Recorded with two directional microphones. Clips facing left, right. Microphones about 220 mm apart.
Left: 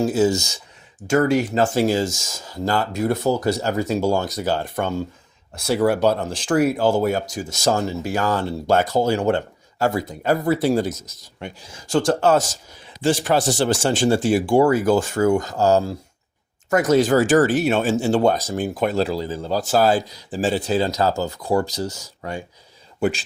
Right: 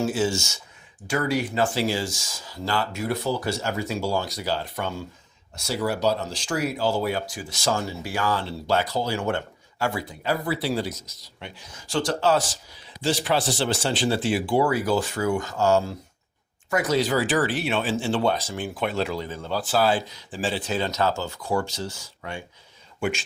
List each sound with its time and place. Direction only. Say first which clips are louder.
0.0 s speech: left 6 dB; 40° left (ahead or behind)
5.5 s a man's voice: left 8 dB; 55° left (ahead or behind); by 23.2 s 35° left (ahead or behind)